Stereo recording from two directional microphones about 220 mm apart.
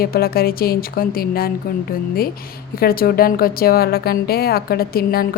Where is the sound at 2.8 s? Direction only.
45° left (ahead or behind).